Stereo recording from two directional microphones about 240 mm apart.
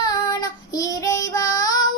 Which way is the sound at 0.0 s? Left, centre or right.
Centre.